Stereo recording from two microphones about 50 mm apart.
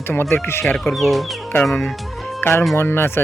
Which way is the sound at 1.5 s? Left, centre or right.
Left.